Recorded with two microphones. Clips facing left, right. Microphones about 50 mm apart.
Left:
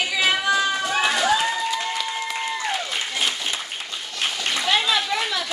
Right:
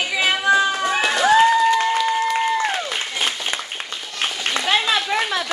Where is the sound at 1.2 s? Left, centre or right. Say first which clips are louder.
Right 7 dB; right.